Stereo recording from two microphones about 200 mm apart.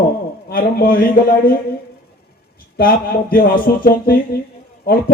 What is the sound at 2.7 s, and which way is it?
Speech, 50° left (ahead or behind).